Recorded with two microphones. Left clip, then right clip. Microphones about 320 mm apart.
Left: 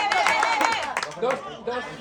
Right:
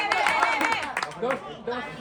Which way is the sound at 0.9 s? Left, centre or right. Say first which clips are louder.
Left 2 dB; left.